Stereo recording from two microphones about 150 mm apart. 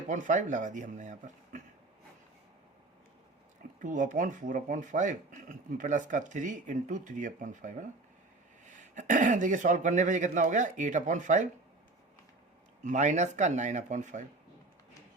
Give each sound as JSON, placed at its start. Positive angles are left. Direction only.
{"t": 0.1, "sound": "speech", "side_deg": -55}
{"t": 3.8, "sound": "speech", "side_deg": -60}
{"t": 12.8, "sound": "speech", "side_deg": -55}